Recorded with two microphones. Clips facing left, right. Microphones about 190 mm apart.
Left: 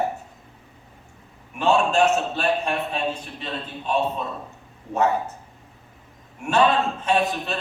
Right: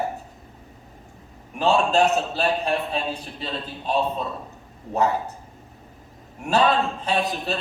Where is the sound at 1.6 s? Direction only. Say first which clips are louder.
Even; 35° right (ahead or behind).